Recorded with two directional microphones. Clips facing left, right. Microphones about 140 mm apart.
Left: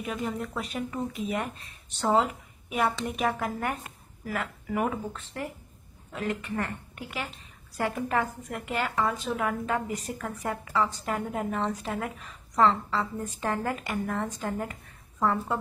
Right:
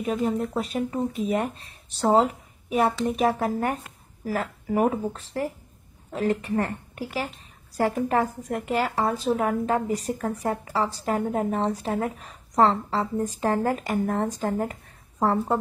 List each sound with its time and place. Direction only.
0.0 s speech: 35° right (ahead or behind)